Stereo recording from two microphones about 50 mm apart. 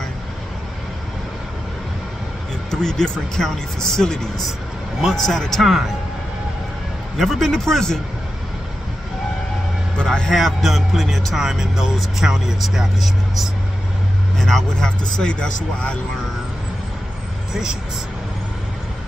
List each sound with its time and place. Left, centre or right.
2.7 s speech: centre
7.2 s speech: centre
10.0 s speech: centre
10.3 s speech: centre
14.4 s speech: centre
14.9 s speech: centre
17.5 s speech: centre